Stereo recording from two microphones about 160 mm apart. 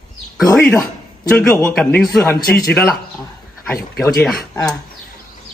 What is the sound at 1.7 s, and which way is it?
Speech, centre (ahead or behind).